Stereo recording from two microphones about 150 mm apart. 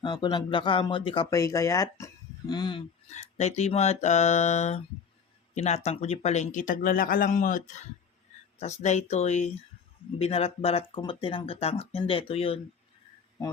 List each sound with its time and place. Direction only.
0.0 s speech: 30° left (ahead or behind)
1.3 s speech: 20° left (ahead or behind)
3.1 s a sound: 50° left (ahead or behind)
5.5 s speech: 45° left (ahead or behind)
8.8 s a sound: 50° left (ahead or behind)
10.2 s speech: 45° left (ahead or behind)